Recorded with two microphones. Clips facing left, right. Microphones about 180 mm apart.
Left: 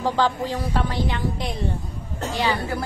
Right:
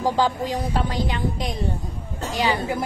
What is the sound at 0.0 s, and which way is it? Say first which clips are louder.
A woman's voice: right 1 dB; 10° right (ahead or behind).